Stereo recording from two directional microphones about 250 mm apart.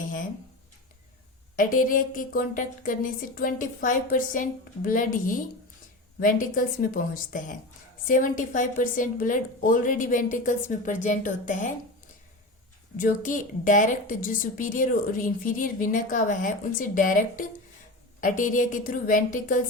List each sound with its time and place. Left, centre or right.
0.0 s a sound: left
1.5 s a woman's voice: left
13.0 s a woman's voice: left